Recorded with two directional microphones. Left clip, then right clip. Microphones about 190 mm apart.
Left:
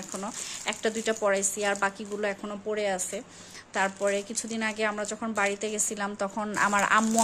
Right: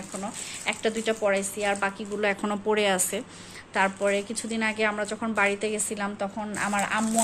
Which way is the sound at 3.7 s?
15° left (ahead or behind).